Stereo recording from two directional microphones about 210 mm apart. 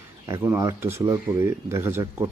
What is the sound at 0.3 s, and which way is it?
Speech, 15° right (ahead or behind).